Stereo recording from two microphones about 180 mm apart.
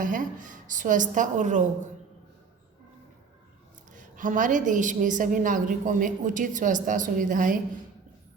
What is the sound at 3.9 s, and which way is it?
A woman's voice, 45° right (ahead or behind).